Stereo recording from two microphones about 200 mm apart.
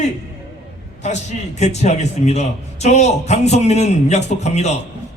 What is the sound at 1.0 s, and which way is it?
Speech, 35° left (ahead or behind).